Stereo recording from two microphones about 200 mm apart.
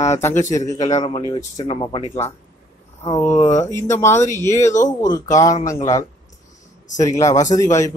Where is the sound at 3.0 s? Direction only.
10° left (ahead or behind).